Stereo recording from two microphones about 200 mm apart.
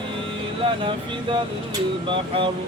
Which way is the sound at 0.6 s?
25° right (ahead or behind).